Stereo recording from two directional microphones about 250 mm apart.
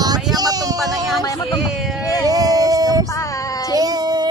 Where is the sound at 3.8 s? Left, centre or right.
Centre.